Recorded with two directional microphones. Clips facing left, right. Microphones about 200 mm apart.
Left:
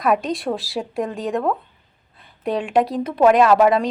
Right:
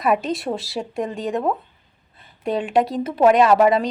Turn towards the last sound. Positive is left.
turn(degrees=0)  # may be behind; listen again after turning